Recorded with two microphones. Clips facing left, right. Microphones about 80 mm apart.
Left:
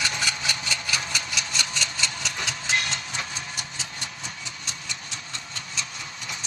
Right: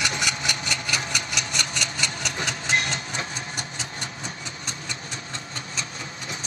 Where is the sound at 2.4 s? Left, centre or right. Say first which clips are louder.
Right 2 dB; right.